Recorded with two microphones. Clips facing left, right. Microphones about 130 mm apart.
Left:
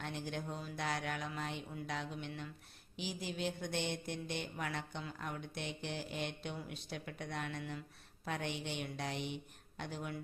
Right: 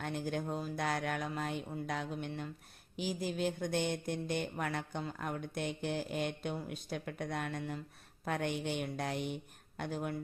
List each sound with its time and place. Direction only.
0.0 s speech: 45° right (ahead or behind)